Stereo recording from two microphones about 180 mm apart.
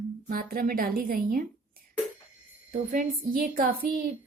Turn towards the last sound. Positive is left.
turn(degrees=-50)  # may be behind; listen again after turning